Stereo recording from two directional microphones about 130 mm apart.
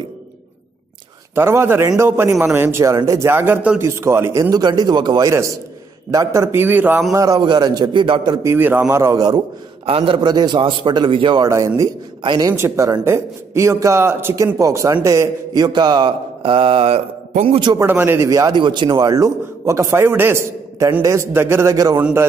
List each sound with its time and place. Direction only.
1.3 s a man's voice: 20° right (ahead or behind)
7.1 s a man's voice: 25° right (ahead or behind)
8.5 s a man's voice: 15° right (ahead or behind)
9.8 s speech: 45° right (ahead or behind)
11.4 s a man's voice: 25° right (ahead or behind)
12.2 s speech: 35° right (ahead or behind)
12.5 s a man's voice: 20° right (ahead or behind); by 17.7 s 40° right (ahead or behind)
17.7 s a man's voice: 15° right (ahead or behind)